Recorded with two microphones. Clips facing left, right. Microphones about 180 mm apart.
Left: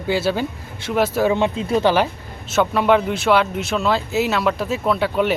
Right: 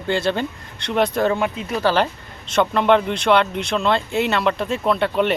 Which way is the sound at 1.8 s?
10° left (ahead or behind).